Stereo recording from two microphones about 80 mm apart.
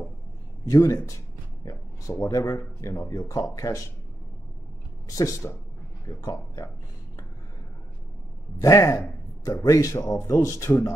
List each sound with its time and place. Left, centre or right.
0.7 s speech: left
1.6 s a sound: left
2.2 s speech: left
5.1 s speech: left
8.5 s speech: left